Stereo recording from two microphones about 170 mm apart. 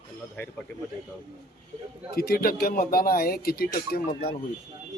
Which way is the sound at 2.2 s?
60° left (ahead or behind).